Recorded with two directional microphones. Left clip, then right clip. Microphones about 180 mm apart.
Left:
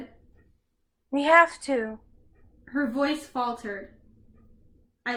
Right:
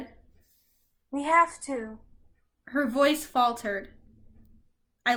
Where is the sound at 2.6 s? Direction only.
15° right (ahead or behind).